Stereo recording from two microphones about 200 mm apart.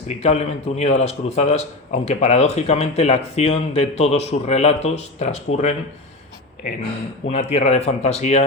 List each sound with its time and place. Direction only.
0.2 s a man's voice: 35° left (ahead or behind)
7.3 s a man's voice: 35° left (ahead or behind)